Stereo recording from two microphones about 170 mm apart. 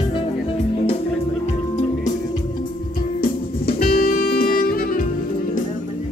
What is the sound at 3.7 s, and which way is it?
Music, 60° left (ahead or behind).